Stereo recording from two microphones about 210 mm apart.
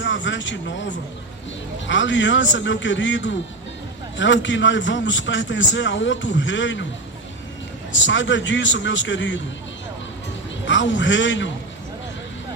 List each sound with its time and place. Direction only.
0.0 s a sound: 60° left (ahead or behind)
1.9 s a man's voice: 60° left (ahead or behind)
7.9 s a man's voice: 60° left (ahead or behind)
10.7 s a man's voice: 60° left (ahead or behind)